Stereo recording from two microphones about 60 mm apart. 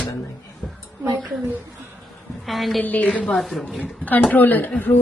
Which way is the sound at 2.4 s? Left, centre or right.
Centre.